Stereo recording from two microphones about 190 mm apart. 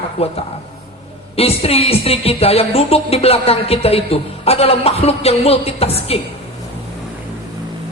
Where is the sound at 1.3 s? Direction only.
30° left (ahead or behind).